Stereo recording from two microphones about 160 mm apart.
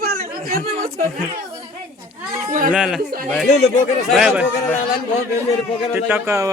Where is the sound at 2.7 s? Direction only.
5° right (ahead or behind).